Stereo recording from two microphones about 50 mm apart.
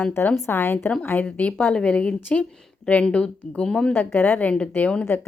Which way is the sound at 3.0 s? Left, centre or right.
Centre.